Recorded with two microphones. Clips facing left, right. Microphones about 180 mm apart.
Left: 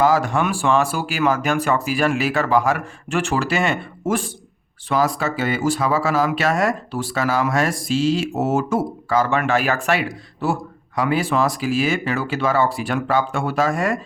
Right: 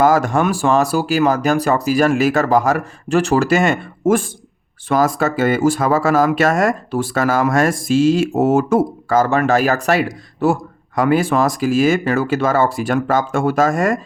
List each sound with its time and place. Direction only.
0.0 s speech: 45° right (ahead or behind)